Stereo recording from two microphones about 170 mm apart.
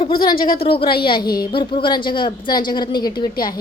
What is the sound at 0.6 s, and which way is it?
A woman's voice, 30° left (ahead or behind).